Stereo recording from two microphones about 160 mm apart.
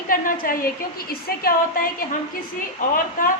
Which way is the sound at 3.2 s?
60° left (ahead or behind).